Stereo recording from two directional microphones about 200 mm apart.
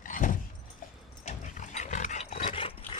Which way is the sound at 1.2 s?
35° left (ahead or behind).